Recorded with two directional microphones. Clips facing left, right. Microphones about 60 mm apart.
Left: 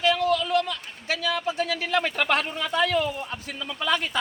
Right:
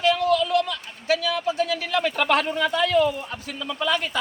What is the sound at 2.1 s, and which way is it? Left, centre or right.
Speech, centre.